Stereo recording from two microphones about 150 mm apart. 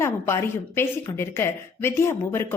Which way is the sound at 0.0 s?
15° left (ahead or behind).